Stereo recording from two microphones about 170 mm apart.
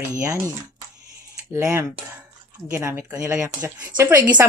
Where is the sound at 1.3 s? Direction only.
15° right (ahead or behind).